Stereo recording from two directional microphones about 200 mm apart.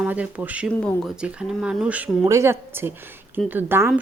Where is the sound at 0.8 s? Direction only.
5° left (ahead or behind); by 3.9 s 10° right (ahead or behind).